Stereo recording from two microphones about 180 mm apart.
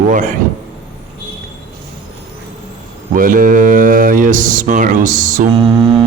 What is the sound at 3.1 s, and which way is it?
Mantra, 50° right (ahead or behind).